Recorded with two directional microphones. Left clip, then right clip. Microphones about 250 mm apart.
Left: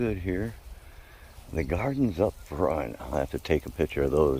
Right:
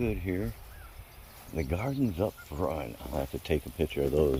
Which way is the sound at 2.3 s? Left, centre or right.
Left.